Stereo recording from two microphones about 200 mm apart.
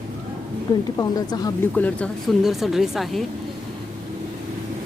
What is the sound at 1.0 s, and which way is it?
Speech, 20° left (ahead or behind).